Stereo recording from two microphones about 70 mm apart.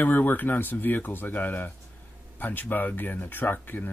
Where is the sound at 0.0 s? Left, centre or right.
Left.